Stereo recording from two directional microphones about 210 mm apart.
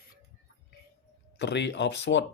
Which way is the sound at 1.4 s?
55° left (ahead or behind).